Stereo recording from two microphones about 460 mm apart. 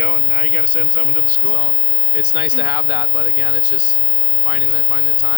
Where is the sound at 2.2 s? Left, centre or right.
Left.